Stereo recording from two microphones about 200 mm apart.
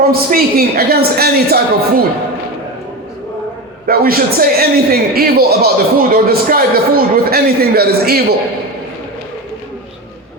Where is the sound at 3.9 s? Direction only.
45° right (ahead or behind).